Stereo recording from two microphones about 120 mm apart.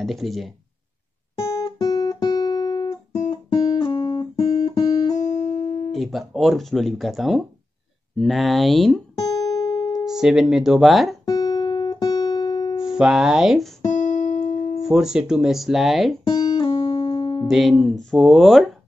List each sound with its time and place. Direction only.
0.0 s speech: centre (ahead or behind)
1.8 s guitar: 30° left (ahead or behind)
3.3 s guitar: 45° left (ahead or behind)
5.1 s music: 75° left (ahead or behind)
5.9 s speech: centre (ahead or behind)
10.0 s speech: 5° right (ahead or behind)
11.2 s guitar: 35° left (ahead or behind)
12.8 s speech: 5° right (ahead or behind)
13.9 s music: 90° left
14.8 s speech: 5° right (ahead or behind)
16.3 s music: 40° left (ahead or behind)
17.1 s music: 35° left (ahead or behind)
17.5 s speech: centre (ahead or behind)